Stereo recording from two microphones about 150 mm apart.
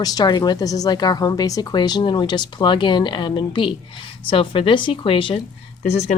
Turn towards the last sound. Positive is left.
turn(degrees=50)  # may be behind; listen again after turning